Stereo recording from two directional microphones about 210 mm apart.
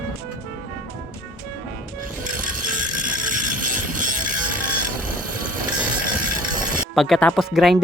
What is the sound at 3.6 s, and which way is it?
Train, 40° right (ahead or behind).